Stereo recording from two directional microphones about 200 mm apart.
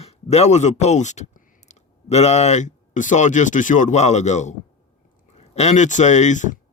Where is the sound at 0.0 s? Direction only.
30° left (ahead or behind).